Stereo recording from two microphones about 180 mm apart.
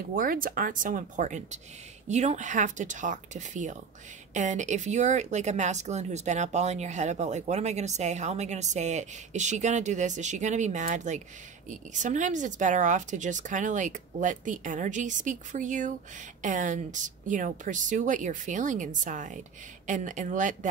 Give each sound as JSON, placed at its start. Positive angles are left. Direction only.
{"t": 0.1, "sound": "a woman's voice", "side_deg": -50}